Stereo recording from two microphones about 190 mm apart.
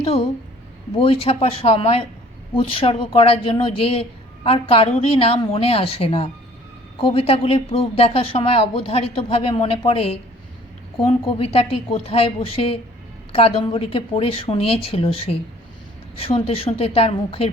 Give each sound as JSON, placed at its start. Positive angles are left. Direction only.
{"t": 0.0, "sound": "speech", "side_deg": 30}
{"t": 11.3, "sound": "a woman's voice", "side_deg": 30}